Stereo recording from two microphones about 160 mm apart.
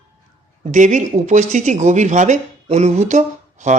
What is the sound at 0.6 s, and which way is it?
Speech, 50° right (ahead or behind).